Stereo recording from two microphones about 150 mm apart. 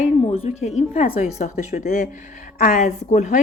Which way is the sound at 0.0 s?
45° left (ahead or behind).